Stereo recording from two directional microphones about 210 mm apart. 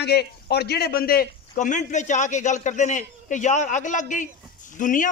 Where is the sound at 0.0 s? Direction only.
50° left (ahead or behind).